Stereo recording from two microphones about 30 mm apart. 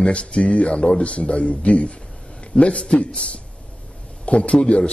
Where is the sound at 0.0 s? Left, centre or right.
Left.